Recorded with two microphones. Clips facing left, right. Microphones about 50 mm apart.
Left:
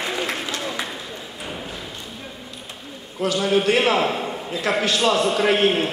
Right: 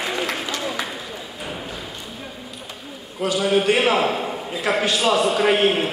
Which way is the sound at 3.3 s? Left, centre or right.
Centre.